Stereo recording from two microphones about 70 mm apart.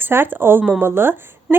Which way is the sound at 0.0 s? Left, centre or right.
Right.